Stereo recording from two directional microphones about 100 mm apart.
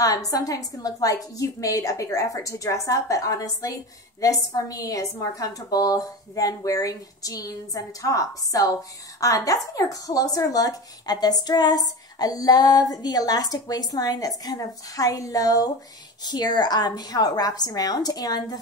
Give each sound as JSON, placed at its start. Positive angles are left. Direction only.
{"t": 0.0, "sound": "speech", "side_deg": 35}